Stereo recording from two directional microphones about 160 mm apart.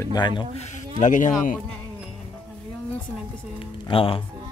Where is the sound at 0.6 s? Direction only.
50° left (ahead or behind).